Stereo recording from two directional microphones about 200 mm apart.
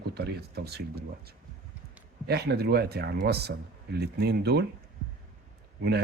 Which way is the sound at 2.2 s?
55° right (ahead or behind).